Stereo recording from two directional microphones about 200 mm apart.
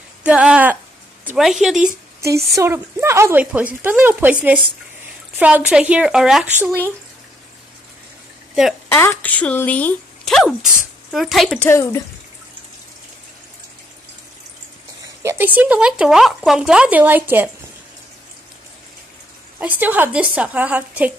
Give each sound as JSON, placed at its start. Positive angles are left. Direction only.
{"t": 0.2, "sound": "speech", "side_deg": -5}
{"t": 1.9, "sound": "speech", "side_deg": -50}
{"t": 2.5, "sound": "speech", "side_deg": -15}
{"t": 8.8, "sound": "speech", "side_deg": 10}
{"t": 11.7, "sound": "speech", "side_deg": 15}
{"t": 15.2, "sound": "speech", "side_deg": -10}
{"t": 19.6, "sound": "speech", "side_deg": -10}